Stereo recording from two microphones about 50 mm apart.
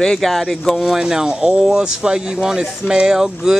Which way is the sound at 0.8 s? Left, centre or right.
Centre.